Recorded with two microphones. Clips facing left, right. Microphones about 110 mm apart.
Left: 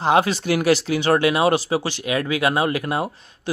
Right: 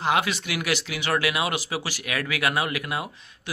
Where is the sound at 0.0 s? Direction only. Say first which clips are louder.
Left 6 dB; 35° left (ahead or behind).